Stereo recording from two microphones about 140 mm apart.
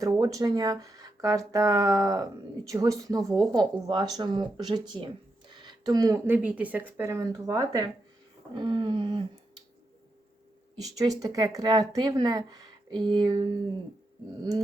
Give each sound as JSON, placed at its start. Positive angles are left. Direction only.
{"t": 0.0, "sound": "speech", "side_deg": -25}
{"t": 8.5, "sound": "a sound", "side_deg": -35}
{"t": 11.2, "sound": "speech", "side_deg": -25}